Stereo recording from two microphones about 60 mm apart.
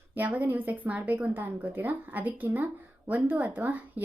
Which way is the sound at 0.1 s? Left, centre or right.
Right.